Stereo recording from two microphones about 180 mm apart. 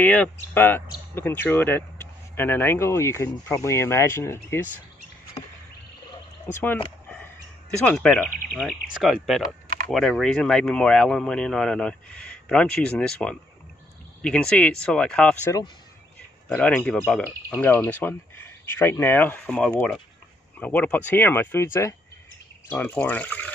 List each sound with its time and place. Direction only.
0.0 s speech: 10° left (ahead or behind)
6.4 s speech: 10° left (ahead or behind)
7.8 s speech: 5° left (ahead or behind)
22.7 s speech: 10° left (ahead or behind)